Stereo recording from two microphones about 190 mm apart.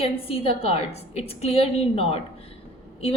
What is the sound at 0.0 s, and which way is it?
A woman's voice, 30° left (ahead or behind).